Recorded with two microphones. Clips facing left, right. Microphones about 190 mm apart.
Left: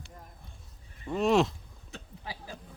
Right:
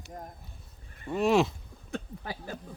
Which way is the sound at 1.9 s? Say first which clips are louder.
Right 7 dB; 55° right (ahead or behind).